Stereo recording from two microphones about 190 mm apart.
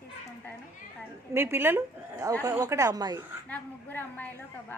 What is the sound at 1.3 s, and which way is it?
Speech, 10° right (ahead or behind).